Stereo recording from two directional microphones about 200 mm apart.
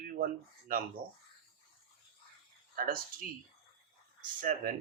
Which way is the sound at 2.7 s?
45° right (ahead or behind).